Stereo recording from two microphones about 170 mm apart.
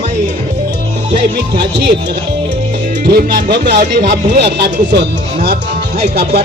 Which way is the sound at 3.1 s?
65° right (ahead or behind).